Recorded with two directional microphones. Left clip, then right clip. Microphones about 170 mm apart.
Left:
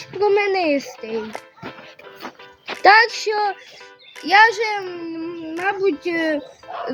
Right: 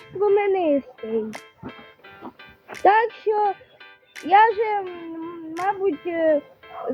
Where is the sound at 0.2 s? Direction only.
25° right (ahead or behind).